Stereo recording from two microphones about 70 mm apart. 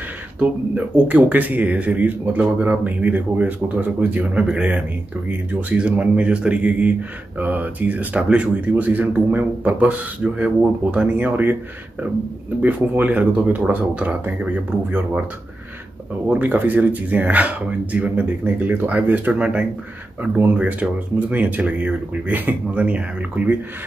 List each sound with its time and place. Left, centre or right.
0.4 s speech: right
12.6 s speech: right
16.3 s speech: right